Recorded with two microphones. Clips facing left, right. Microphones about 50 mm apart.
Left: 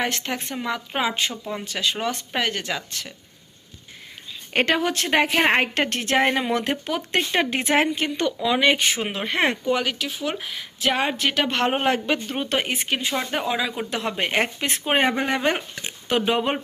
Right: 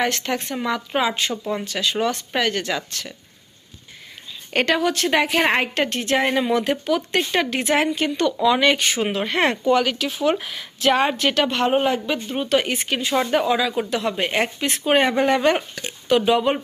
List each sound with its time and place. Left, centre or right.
0.1 s speech: centre
1.3 s speech: centre
1.6 s speech: centre
4.5 s a woman's voice: left
8.4 s speech: centre
11.4 s a woman's voice: left
12.5 s speech: centre
13.9 s a woman's voice: left
14.8 s a woman's voice: centre